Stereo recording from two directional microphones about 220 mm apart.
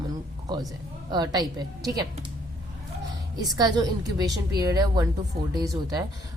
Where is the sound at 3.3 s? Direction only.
20° right (ahead or behind).